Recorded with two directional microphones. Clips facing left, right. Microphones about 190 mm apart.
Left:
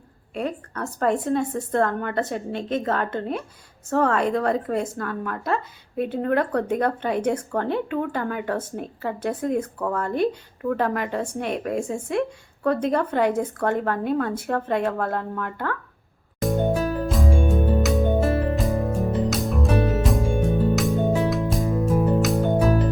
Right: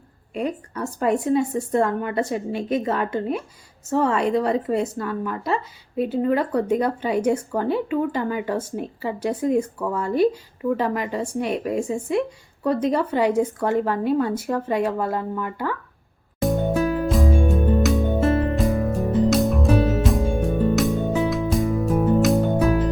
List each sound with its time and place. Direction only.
0.3 s speech: 10° right (ahead or behind)
17.1 s music: centre (ahead or behind)